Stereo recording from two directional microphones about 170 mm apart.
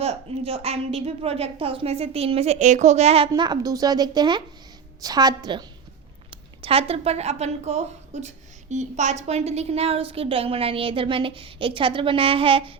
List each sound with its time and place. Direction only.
0.0 s a woman's voice: 35° right (ahead or behind)